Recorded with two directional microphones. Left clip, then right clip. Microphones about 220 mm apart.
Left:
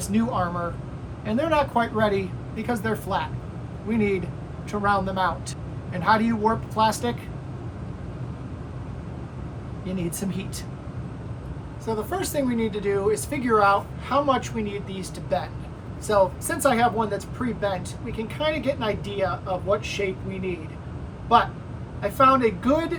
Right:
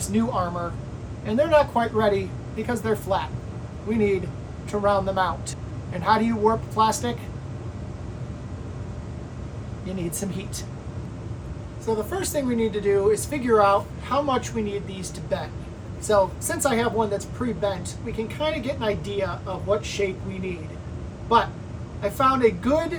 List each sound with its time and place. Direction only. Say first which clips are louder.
0.1 s speech: even; 5° right (ahead or behind)
9.8 s speech: even; centre (ahead or behind)
11.9 s speech: right 1 dB; centre (ahead or behind)
22.0 s speech: left 1 dB; centre (ahead or behind)